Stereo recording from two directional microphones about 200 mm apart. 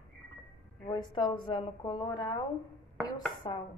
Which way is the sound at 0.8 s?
20° left (ahead or behind).